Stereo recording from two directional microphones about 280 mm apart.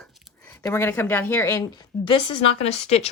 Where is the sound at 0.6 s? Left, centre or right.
Centre.